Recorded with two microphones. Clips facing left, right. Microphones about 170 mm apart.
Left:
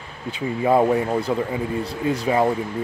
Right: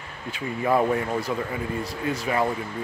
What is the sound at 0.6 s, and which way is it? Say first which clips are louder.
Speech: left 4 dB; 20° left (ahead or behind).